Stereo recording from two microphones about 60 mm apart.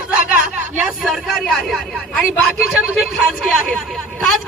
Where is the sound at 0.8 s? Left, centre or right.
Centre.